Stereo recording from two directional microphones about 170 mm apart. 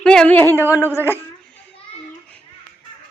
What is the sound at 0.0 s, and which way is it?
A woman's voice, 5° left (ahead or behind).